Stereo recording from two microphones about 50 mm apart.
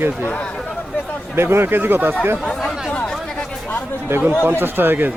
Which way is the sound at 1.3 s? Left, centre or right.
Right.